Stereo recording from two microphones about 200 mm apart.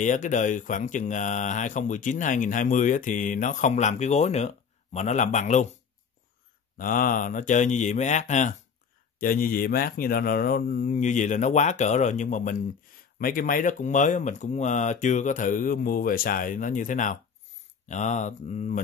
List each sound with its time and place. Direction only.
0.0 s speech: 40° left (ahead or behind)
6.8 s speech: 45° left (ahead or behind)